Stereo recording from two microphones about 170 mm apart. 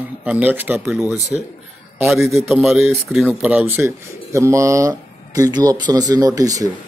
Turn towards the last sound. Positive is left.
turn(degrees=-20)  # may be behind; listen again after turning